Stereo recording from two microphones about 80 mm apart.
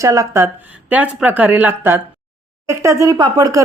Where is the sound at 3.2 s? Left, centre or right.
Right.